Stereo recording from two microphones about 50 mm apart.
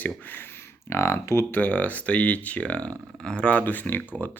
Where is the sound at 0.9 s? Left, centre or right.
Left.